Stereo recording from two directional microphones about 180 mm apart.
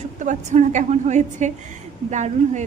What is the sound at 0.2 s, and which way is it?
A woman's voice, 40° right (ahead or behind).